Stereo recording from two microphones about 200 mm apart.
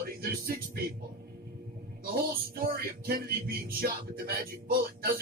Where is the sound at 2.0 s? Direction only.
45° right (ahead or behind).